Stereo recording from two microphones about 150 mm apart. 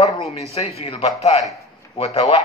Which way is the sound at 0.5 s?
45° left (ahead or behind).